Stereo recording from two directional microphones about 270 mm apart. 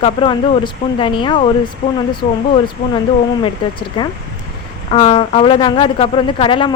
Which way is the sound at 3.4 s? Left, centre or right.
Centre.